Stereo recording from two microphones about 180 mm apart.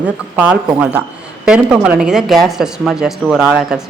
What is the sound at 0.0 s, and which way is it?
Speech, 10° right (ahead or behind).